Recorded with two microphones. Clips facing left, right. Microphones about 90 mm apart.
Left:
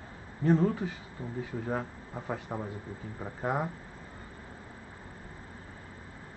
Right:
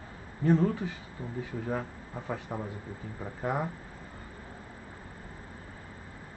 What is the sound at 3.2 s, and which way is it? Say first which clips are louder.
Speech: even; 15° left (ahead or behind).